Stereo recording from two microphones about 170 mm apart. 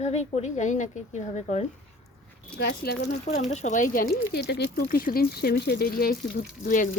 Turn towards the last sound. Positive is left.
turn(degrees=50)  # may be behind; listen again after turning